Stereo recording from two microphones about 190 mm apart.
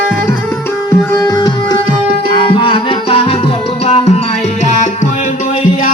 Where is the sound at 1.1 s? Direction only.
15° left (ahead or behind).